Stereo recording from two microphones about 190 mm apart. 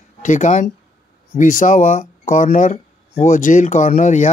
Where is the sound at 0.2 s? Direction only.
40° left (ahead or behind).